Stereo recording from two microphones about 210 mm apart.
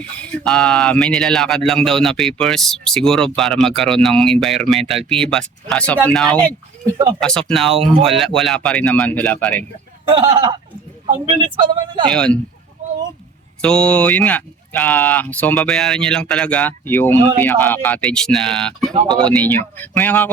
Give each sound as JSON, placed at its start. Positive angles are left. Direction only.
{"t": 0.0, "sound": "speech", "side_deg": 5}
{"t": 10.2, "sound": "a man's voice", "side_deg": -25}
{"t": 12.1, "sound": "speech", "side_deg": 5}
{"t": 13.6, "sound": "speech", "side_deg": 5}